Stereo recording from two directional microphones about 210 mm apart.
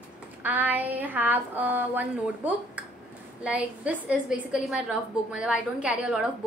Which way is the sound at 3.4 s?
5° right (ahead or behind).